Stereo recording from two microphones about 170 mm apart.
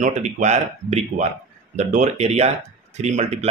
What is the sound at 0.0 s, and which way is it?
Speech, 45° right (ahead or behind).